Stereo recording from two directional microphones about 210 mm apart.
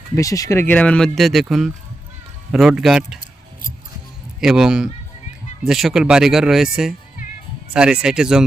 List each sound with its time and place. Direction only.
0.2 s speech: 15° left (ahead or behind)
0.7 s speech: 5° left (ahead or behind)
4.4 s speech: centre (ahead or behind)